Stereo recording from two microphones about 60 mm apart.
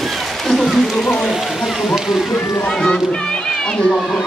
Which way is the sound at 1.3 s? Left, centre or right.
Centre.